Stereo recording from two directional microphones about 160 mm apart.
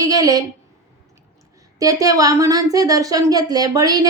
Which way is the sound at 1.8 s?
20° right (ahead or behind).